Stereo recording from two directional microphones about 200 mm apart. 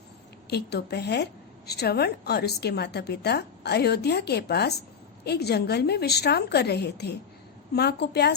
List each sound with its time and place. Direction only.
0.5 s a woman's voice: 55° left (ahead or behind)